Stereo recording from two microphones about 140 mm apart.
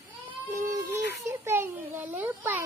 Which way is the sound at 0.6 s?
25° right (ahead or behind).